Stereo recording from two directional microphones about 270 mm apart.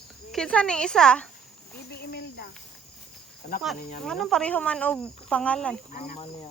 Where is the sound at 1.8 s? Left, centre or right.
Left.